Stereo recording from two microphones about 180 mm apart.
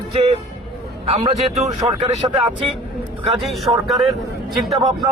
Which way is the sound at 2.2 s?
25° right (ahead or behind).